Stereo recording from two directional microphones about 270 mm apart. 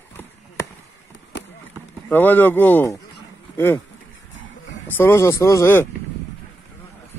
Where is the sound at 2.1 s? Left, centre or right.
Centre.